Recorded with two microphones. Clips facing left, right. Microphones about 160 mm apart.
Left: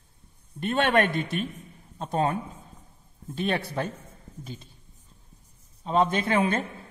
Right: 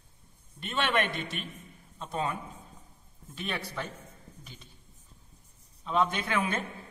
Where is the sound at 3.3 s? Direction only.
50° left (ahead or behind).